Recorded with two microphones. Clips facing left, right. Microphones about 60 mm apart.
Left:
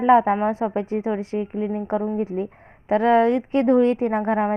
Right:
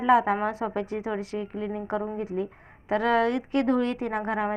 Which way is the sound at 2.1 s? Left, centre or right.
Left.